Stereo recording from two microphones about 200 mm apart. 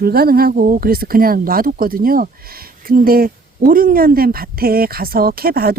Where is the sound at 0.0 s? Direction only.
50° right (ahead or behind).